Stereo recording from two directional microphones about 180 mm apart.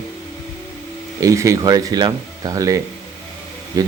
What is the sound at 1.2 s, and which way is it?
Speech, 15° right (ahead or behind).